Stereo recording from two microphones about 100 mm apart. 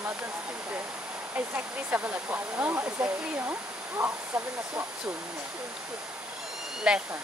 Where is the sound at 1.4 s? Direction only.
20° right (ahead or behind).